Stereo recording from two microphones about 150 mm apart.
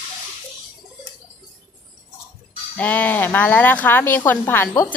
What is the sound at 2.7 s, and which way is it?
Speech, 10° left (ahead or behind).